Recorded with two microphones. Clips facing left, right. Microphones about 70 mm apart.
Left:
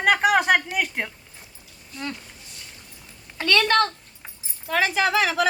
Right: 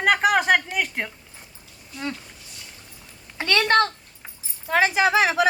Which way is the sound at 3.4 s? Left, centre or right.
Right.